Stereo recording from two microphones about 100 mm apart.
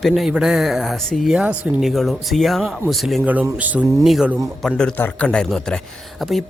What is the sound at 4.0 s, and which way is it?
Speech, 5° right (ahead or behind).